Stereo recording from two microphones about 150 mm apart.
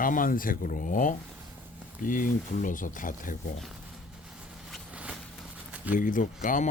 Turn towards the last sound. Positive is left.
turn(degrees=60)  # may be behind; listen again after turning